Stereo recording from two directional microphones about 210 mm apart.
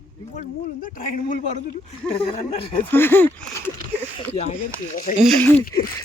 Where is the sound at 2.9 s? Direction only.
10° left (ahead or behind).